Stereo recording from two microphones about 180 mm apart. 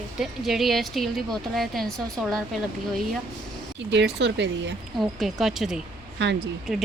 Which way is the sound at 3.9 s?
75° right (ahead or behind).